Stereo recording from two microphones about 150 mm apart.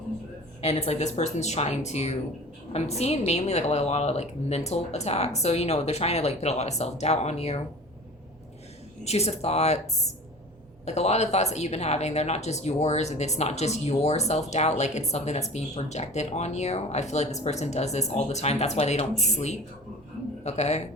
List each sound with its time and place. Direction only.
0.6 s a woman's voice: 45° left (ahead or behind)
9.0 s a woman's voice: 45° left (ahead or behind)